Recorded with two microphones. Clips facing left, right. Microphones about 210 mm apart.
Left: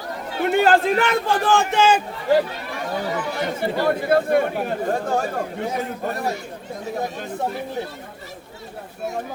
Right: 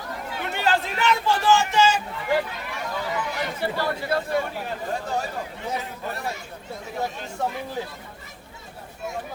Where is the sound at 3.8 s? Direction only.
55° left (ahead or behind).